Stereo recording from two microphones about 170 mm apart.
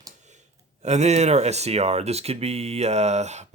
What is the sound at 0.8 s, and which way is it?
Speech, 40° right (ahead or behind).